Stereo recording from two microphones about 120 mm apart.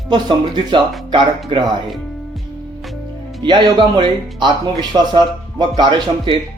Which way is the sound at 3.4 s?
40° right (ahead or behind).